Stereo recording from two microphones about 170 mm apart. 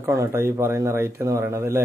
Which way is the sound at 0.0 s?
15° right (ahead or behind).